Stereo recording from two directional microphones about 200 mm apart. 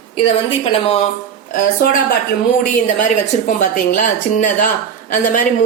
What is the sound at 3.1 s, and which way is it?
Speech, 40° left (ahead or behind).